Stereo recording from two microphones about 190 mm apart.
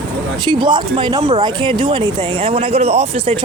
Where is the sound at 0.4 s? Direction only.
25° right (ahead or behind).